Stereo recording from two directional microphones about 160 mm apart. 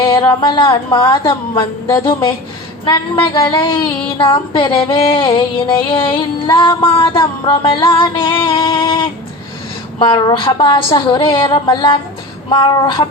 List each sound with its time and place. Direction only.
0.1 s a woman's voice: 30° left (ahead or behind)
2.8 s a woman's voice: 30° left (ahead or behind)
4.2 s music: 30° left (ahead or behind)
10.0 s a woman's voice: 30° left (ahead or behind)